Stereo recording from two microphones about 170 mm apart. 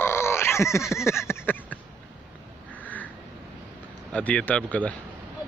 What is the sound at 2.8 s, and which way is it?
Crow, 10° left (ahead or behind).